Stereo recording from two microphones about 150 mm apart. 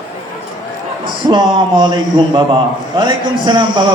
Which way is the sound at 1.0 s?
35° right (ahead or behind).